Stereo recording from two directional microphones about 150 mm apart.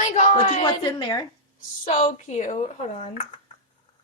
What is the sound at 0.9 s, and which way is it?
Speech, 30° left (ahead or behind).